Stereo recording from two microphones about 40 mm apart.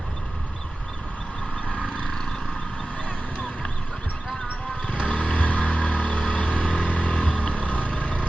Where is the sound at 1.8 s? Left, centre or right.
Left.